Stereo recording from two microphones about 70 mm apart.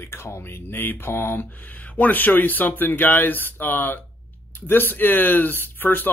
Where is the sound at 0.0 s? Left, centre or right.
Left.